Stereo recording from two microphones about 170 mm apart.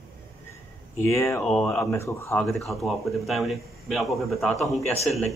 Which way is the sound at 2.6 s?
Centre (ahead or behind).